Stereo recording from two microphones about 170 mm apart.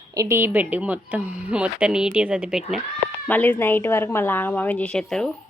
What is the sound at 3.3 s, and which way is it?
A woman's voice, 10° left (ahead or behind).